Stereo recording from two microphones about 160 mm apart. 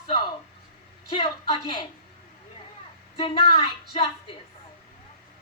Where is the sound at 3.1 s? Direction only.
35° left (ahead or behind).